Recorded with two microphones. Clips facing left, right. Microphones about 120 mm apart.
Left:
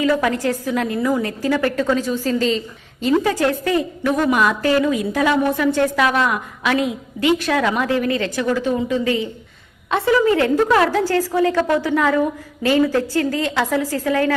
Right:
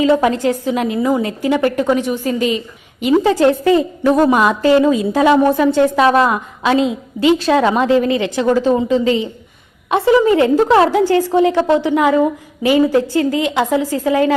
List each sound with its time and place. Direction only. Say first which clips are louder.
0.0 s a woman's voice: right 5 dB; 25° right (ahead or behind)
8.4 s a woman's voice: right 7 dB; 30° right (ahead or behind)